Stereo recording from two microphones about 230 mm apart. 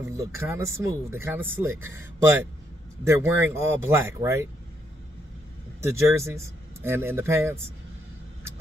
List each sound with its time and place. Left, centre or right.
0.0 s speech: centre
3.0 s speech: centre
5.8 s speech: centre